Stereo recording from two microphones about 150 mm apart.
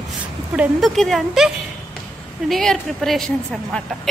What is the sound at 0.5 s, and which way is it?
Speech, 5° right (ahead or behind).